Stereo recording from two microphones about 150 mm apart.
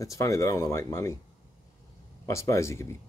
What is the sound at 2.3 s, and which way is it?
Speech, 20° left (ahead or behind).